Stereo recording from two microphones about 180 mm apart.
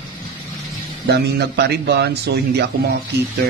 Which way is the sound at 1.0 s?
65° right (ahead or behind).